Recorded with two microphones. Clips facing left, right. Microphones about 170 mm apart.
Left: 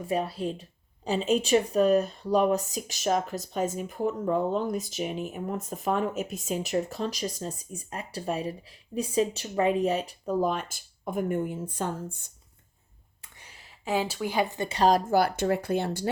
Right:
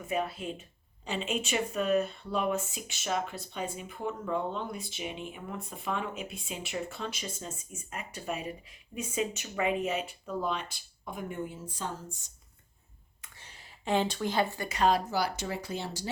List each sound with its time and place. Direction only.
0.0 s speech: 35° left (ahead or behind); by 12.3 s 55° left (ahead or behind)
13.8 s speech: 5° left (ahead or behind)
14.7 s speech: 35° left (ahead or behind); by 16.0 s 55° left (ahead or behind)